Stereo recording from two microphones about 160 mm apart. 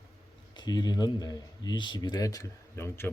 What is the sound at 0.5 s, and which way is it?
Speech, 25° left (ahead or behind).